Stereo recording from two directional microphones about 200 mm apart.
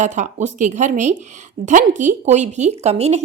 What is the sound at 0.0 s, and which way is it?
A woman's voice, 35° right (ahead or behind).